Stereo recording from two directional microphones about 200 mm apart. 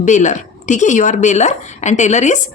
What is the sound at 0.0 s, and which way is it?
Speech, 35° left (ahead or behind).